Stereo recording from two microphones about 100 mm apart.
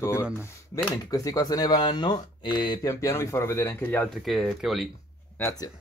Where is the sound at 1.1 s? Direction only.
40° left (ahead or behind).